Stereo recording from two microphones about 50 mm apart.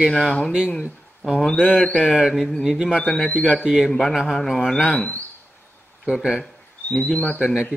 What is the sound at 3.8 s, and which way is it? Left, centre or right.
A man's voice, centre.